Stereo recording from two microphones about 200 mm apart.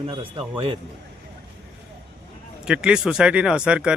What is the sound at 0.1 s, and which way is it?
Speech, 25° right (ahead or behind).